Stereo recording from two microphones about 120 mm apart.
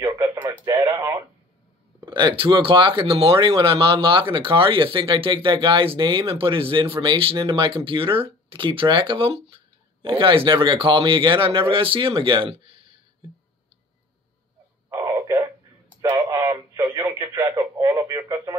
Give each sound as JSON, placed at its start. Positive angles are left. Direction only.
{"t": 0.2, "sound": "radio", "side_deg": -25}
{"t": 2.0, "sound": "speech", "side_deg": -40}
{"t": 15.0, "sound": "a sound", "side_deg": -25}
{"t": 16.3, "sound": "a sound", "side_deg": -30}
{"t": 16.8, "sound": "speech", "side_deg": -25}
{"t": 18.3, "sound": "radio", "side_deg": -30}